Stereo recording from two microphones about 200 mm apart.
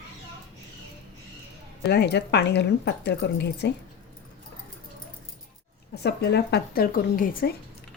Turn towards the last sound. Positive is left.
turn(degrees=45)  # may be behind; listen again after turning